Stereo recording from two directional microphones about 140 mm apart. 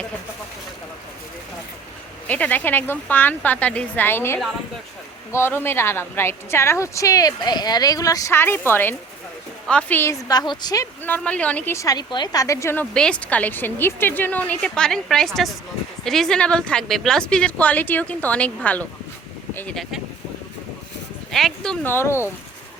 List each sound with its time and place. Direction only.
2.2 s a woman's voice: 10° left (ahead or behind); by 10.8 s 30° left (ahead or behind)
11.0 s a woman's voice: 10° left (ahead or behind)
12.8 s speech: 5° left (ahead or behind)
21.3 s speech: 5° left (ahead or behind)
21.8 s speech: 15° left (ahead or behind)